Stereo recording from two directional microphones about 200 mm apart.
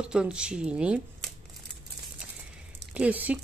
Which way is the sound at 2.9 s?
5° right (ahead or behind).